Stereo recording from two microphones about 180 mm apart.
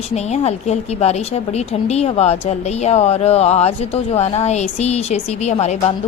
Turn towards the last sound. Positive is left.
turn(degrees=40)  # may be behind; listen again after turning